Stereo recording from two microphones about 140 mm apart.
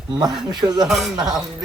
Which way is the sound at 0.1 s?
30° right (ahead or behind).